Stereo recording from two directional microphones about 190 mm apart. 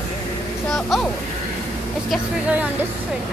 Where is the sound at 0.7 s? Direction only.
Centre (ahead or behind).